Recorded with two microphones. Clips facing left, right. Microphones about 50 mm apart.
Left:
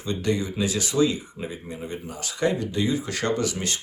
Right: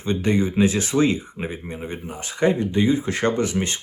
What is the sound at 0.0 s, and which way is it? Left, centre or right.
Speech, right.